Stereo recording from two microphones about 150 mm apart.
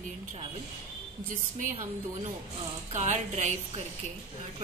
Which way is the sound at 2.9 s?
45° right (ahead or behind).